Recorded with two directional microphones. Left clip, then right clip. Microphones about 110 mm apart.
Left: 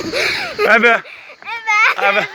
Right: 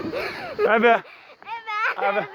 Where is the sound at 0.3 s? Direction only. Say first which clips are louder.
Left 5 dB; 5° left (ahead or behind).